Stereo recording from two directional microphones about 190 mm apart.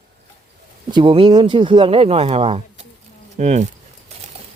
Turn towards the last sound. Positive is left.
turn(degrees=-35)  # may be behind; listen again after turning